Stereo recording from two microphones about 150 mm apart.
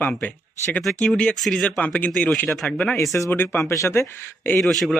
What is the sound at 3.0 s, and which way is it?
Speech, 20° left (ahead or behind).